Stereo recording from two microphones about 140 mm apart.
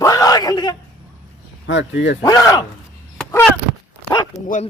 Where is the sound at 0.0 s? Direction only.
25° left (ahead or behind).